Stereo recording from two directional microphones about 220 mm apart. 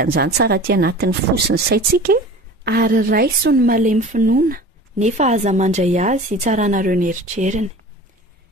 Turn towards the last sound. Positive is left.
turn(degrees=-35)  # may be behind; listen again after turning